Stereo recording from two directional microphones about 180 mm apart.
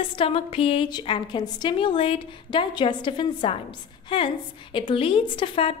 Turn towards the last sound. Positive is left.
turn(degrees=30)  # may be behind; listen again after turning